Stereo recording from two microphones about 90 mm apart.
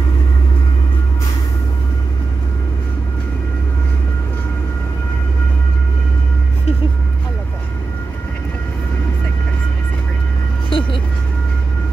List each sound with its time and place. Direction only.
10.7 s vehicle: 70° left (ahead or behind)